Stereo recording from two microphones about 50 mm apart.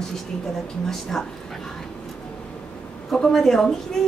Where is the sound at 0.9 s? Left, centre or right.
Centre.